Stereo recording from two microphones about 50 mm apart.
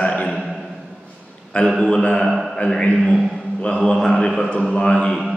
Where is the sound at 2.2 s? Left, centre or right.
Centre.